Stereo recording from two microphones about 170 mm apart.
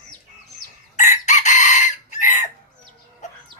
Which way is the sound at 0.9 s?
45° left (ahead or behind).